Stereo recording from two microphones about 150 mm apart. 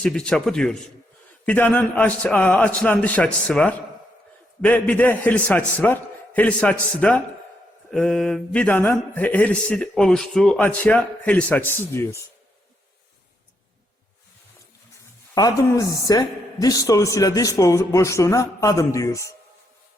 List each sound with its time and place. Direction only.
0.0 s speech: 5° left (ahead or behind)
1.5 s mantra: 10° left (ahead or behind)
15.4 s a woman's voice: 25° left (ahead or behind)